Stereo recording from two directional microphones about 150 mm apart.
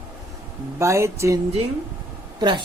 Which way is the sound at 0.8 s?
20° right (ahead or behind).